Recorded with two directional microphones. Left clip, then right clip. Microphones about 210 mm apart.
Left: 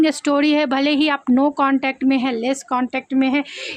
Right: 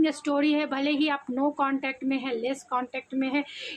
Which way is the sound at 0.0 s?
50° left (ahead or behind).